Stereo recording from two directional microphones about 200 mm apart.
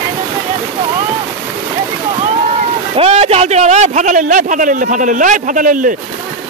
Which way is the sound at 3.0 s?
30° right (ahead or behind).